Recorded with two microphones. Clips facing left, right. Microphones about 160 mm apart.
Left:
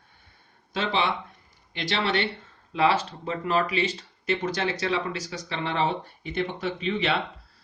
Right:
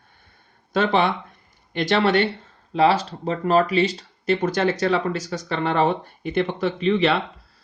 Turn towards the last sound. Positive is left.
turn(degrees=-65)  # may be behind; listen again after turning